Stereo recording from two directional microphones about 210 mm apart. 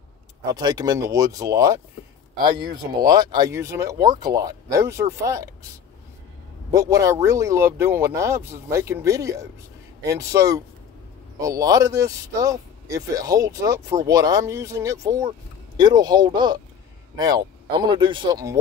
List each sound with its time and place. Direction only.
0.5 s speech: 20° right (ahead or behind)
3.0 s speech: 20° right (ahead or behind)
6.7 s speech: 15° right (ahead or behind)